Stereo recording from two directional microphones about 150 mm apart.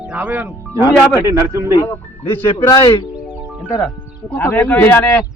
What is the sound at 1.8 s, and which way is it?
Speech, 15° left (ahead or behind).